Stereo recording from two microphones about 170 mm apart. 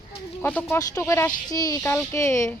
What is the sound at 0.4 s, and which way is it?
Speech, 10° left (ahead or behind).